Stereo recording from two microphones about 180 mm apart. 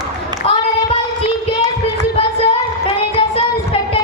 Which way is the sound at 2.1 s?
30° left (ahead or behind).